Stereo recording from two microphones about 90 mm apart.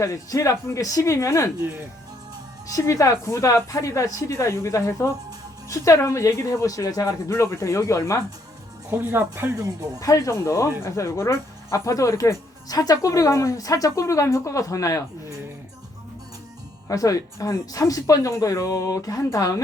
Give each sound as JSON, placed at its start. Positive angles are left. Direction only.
{"t": 0.0, "sound": "speech", "side_deg": 35}
{"t": 2.6, "sound": "speech", "side_deg": 35}
{"t": 8.9, "sound": "speech", "side_deg": -25}
{"t": 9.6, "sound": "speech", "side_deg": -40}
{"t": 10.0, "sound": "speech", "side_deg": 35}
{"t": 16.9, "sound": "speech", "side_deg": 40}